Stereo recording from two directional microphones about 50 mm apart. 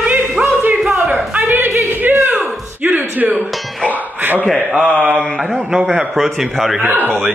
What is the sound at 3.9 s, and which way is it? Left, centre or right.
Music, right.